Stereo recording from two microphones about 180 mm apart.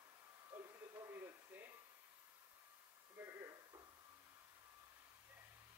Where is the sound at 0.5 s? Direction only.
15° right (ahead or behind).